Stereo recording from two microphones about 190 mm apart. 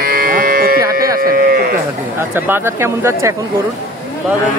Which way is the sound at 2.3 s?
10° right (ahead or behind).